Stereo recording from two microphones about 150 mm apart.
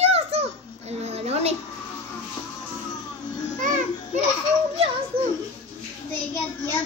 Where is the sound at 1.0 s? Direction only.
45° right (ahead or behind).